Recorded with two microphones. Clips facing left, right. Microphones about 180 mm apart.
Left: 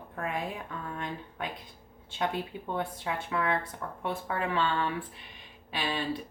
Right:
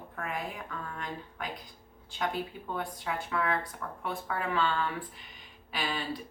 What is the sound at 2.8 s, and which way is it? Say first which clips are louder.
Speech: left 1 dB; 25° left (ahead or behind).